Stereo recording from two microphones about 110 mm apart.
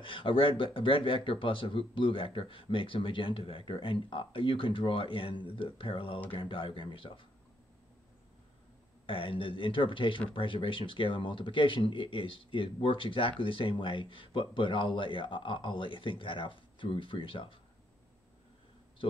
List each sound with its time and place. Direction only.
0.0 s speech: 50° left (ahead or behind)
9.0 s speech: 50° left (ahead or behind)